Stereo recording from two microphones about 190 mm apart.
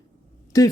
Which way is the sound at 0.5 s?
20° left (ahead or behind).